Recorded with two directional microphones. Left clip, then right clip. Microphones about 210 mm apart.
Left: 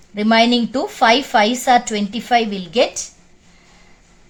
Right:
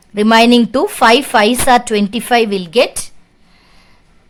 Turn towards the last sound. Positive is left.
turn(degrees=-40)  # may be behind; listen again after turning